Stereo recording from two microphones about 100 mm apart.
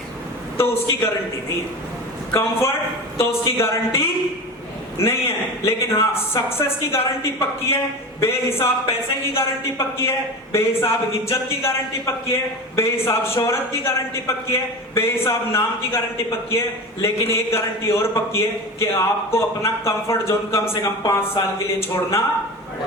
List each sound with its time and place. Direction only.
0.5 s speech: 25° left (ahead or behind)
2.3 s speech: 30° left (ahead or behind)